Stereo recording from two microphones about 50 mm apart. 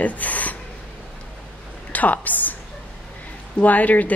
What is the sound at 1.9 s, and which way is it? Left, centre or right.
Speech, left.